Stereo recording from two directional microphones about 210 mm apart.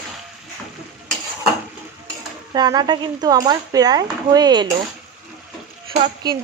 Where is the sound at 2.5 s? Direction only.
20° right (ahead or behind).